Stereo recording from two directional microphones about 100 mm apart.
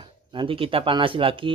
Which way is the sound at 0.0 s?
55° right (ahead or behind).